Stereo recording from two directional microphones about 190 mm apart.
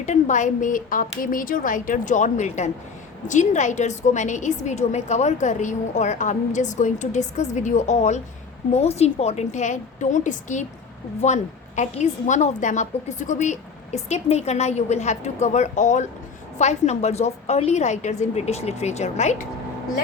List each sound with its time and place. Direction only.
0.0 s a woman's voice: 40° left (ahead or behind)